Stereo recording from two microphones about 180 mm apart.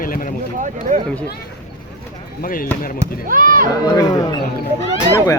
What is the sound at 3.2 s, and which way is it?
Speech, 50° right (ahead or behind).